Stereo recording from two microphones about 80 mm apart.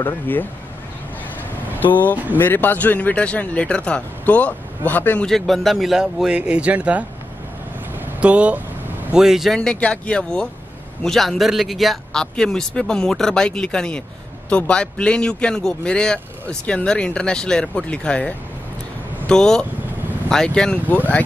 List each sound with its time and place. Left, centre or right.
0.0 s a man's voice: left
1.8 s a man's voice: left
5.2 s a man's voice: centre
7.9 s a sound: centre
9.1 s speech: centre
9.6 s a man's voice: centre